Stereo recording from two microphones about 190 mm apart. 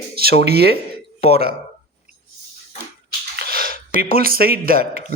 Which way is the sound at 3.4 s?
50° right (ahead or behind).